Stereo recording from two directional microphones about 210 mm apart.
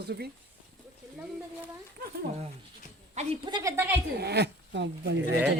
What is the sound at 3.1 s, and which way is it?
Speech, 20° right (ahead or behind).